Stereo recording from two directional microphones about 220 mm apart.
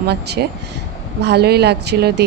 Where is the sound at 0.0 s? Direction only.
50° right (ahead or behind).